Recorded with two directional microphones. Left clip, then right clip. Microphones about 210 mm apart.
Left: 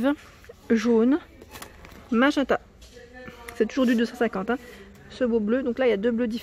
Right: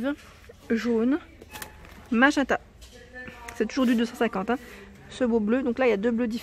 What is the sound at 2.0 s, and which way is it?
Speech, centre (ahead or behind).